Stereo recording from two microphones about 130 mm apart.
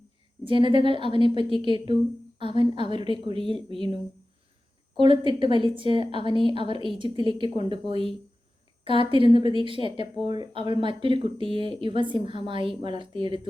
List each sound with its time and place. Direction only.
0.4 s speech: 40° right (ahead or behind)
4.9 s speech: 40° right (ahead or behind)